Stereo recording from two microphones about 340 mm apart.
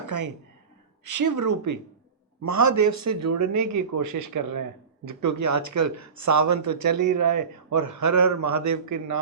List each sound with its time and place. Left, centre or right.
0.1 s a man's voice: right